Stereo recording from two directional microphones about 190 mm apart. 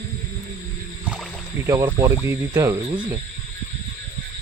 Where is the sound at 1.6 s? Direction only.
15° right (ahead or behind).